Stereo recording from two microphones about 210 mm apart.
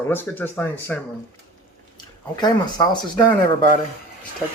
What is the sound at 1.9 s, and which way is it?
Speech, 20° left (ahead or behind).